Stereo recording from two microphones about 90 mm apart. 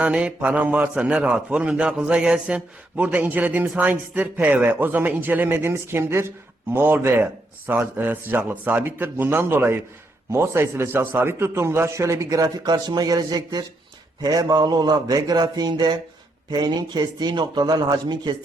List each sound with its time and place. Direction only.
0.0 s a man's voice: 10° right (ahead or behind); by 18.3 s 55° right (ahead or behind)